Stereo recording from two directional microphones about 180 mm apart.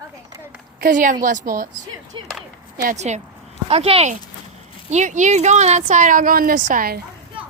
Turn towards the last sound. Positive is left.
turn(degrees=-50)  # may be behind; listen again after turning